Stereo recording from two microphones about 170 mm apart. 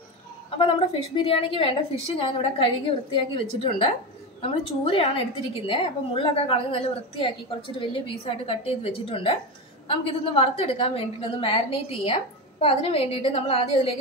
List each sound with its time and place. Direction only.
0.5 s a woman's voice: 30° left (ahead or behind)